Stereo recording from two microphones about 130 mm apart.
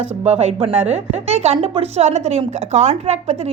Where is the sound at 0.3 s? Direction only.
55° right (ahead or behind).